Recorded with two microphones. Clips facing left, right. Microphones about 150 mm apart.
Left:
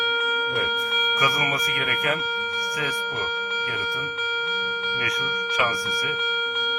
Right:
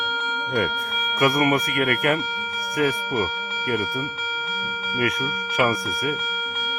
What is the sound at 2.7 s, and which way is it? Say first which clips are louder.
Speech: right 10 dB; 55° right (ahead or behind).